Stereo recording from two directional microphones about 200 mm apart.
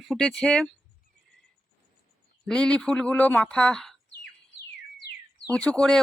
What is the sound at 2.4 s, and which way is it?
Speech, 5° left (ahead or behind).